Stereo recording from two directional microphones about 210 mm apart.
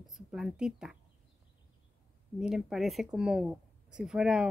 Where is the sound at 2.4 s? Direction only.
Centre (ahead or behind).